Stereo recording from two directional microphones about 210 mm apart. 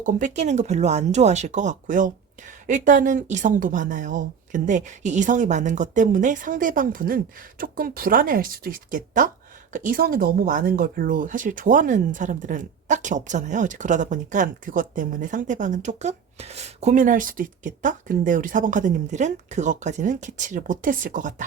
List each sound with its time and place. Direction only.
0.0 s speech: 35° right (ahead or behind)